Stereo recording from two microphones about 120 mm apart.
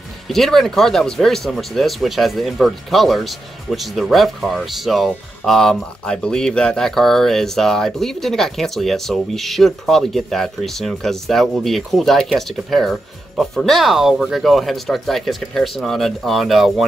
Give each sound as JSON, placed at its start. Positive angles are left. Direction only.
{"t": 0.3, "sound": "speech", "side_deg": 0}